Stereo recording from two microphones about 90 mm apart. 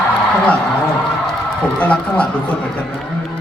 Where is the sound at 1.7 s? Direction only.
15° left (ahead or behind).